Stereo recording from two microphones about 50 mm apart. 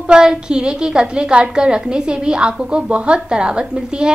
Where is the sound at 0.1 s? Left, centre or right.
Centre.